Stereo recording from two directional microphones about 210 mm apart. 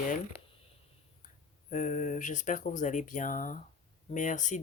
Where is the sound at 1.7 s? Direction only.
35° left (ahead or behind).